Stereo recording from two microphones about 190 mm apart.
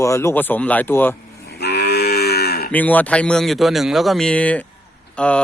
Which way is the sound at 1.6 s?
60° left (ahead or behind).